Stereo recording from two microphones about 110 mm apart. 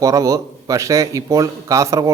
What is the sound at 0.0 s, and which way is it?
A man's voice, 30° right (ahead or behind).